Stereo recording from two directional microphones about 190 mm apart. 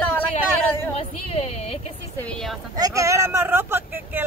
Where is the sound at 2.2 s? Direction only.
5° left (ahead or behind).